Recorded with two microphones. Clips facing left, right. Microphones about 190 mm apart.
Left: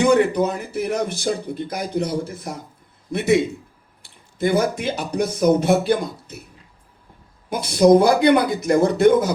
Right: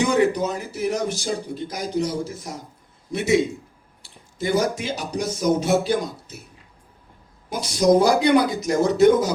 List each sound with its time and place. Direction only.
0.0 s speech: 55° left (ahead or behind)
7.5 s speech: 55° left (ahead or behind)